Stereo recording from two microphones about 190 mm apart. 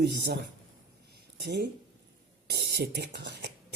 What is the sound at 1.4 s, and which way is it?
Speech, 60° right (ahead or behind).